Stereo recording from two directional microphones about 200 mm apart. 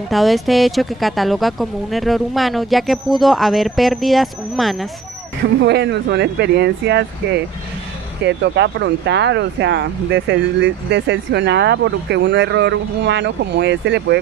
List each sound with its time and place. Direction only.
0.1 s speech: centre (ahead or behind)
5.6 s speech: 60° right (ahead or behind)